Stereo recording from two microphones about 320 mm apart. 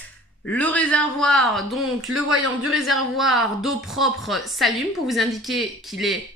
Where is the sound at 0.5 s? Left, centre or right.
Centre.